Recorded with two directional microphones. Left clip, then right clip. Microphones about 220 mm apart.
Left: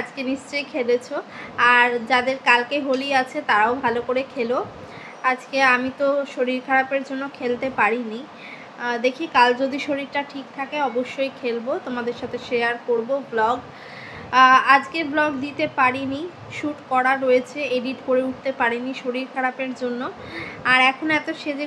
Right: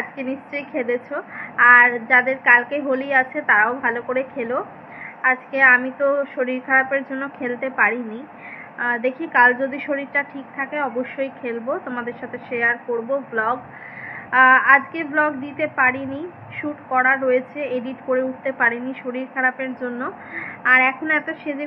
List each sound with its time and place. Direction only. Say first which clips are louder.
0.2 s a woman's voice: left 1 dB; 20° left (ahead or behind)